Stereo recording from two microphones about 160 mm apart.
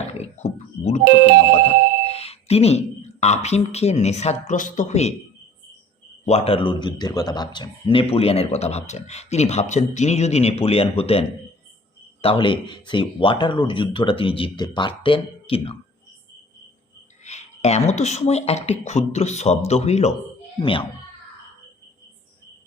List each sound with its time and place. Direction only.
0.1 s speech: 45° left (ahead or behind)
2.0 s speech: 40° left (ahead or behind)
6.2 s speech: 40° left (ahead or behind)
17.2 s speech: 45° left (ahead or behind)
20.6 s speech: 30° left (ahead or behind)